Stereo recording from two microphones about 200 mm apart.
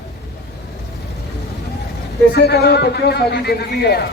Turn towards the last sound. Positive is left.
turn(degrees=55)  # may be behind; listen again after turning